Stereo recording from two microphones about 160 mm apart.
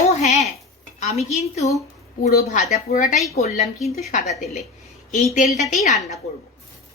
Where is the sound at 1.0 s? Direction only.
45° left (ahead or behind).